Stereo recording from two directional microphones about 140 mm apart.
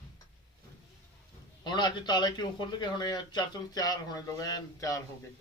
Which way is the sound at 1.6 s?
30° left (ahead or behind).